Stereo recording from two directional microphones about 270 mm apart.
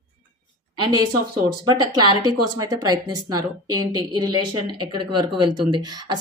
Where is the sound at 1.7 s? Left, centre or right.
Centre.